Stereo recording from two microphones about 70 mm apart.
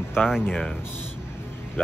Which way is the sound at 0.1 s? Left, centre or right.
Centre.